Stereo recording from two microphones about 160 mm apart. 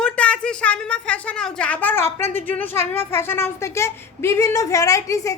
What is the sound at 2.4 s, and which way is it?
A woman's voice, 10° left (ahead or behind).